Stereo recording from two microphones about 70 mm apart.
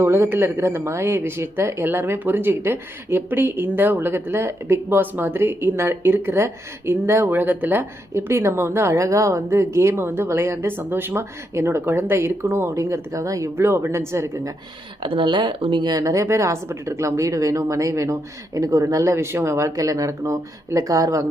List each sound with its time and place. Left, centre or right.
0.0 s speech: right
13.6 s speech: right
16.0 s speech: right